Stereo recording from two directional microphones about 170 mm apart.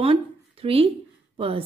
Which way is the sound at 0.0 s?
35° right (ahead or behind).